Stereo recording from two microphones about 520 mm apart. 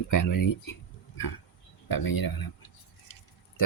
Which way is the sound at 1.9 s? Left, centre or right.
Left.